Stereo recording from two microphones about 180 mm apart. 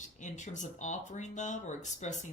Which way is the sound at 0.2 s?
45° left (ahead or behind).